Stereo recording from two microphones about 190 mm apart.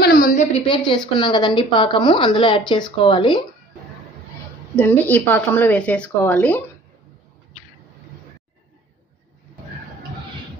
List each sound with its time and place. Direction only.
0.0 s a sound: 50° left (ahead or behind)
0.6 s a woman's voice: 25° left (ahead or behind)
4.7 s a woman's voice: 10° left (ahead or behind)